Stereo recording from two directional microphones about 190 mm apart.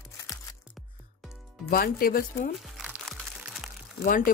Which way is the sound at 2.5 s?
5° right (ahead or behind).